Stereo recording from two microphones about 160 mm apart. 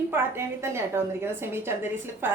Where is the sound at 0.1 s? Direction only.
15° right (ahead or behind).